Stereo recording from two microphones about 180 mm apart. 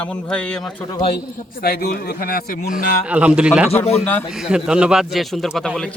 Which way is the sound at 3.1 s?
5° right (ahead or behind).